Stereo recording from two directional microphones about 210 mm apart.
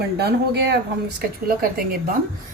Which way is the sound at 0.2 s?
50° right (ahead or behind).